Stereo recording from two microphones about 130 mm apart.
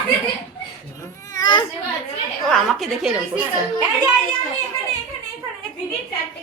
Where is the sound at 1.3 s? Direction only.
30° left (ahead or behind).